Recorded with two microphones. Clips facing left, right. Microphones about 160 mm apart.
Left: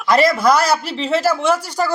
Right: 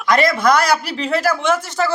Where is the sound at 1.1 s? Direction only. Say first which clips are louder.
Left 1 dB; 30° left (ahead or behind).